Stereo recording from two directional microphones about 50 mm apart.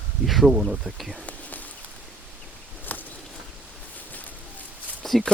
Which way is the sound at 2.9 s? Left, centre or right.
Left.